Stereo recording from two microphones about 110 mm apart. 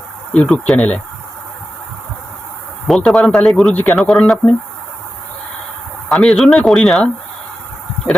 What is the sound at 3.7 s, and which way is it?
Speech, 15° left (ahead or behind).